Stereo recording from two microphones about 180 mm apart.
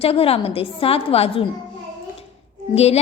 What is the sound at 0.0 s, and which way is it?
A woman's voice, 30° left (ahead or behind).